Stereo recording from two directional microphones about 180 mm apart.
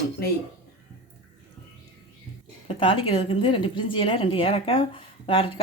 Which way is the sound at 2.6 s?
30° left (ahead or behind).